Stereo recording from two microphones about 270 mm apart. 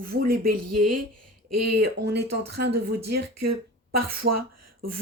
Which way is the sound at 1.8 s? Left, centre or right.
Right.